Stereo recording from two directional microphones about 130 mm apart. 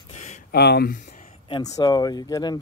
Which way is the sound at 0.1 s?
60° left (ahead or behind).